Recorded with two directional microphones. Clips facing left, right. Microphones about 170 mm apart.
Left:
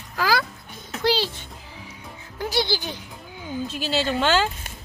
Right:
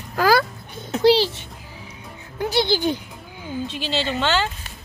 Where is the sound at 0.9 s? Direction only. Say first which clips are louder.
Right 7 dB; 25° right (ahead or behind).